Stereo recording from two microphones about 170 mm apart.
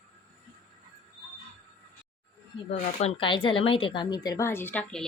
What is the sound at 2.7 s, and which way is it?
Speech, 40° left (ahead or behind).